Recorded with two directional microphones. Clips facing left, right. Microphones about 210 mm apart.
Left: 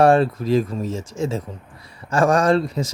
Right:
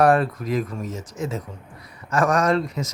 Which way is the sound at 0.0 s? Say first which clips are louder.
Left 3 dB; 25° left (ahead or behind).